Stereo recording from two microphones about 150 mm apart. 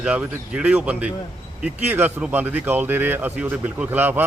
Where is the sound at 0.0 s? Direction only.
10° right (ahead or behind).